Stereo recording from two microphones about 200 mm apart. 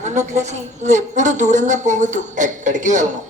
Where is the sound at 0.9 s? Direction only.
35° right (ahead or behind).